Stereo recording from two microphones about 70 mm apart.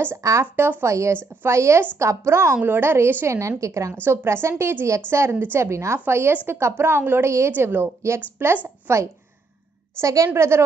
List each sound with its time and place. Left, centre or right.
0.2 s a woman's voice: right
3.3 s a woman's voice: right
3.9 s speech: right
9.9 s a woman's voice: right